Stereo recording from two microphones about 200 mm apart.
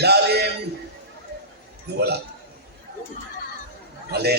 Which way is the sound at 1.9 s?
55° right (ahead or behind).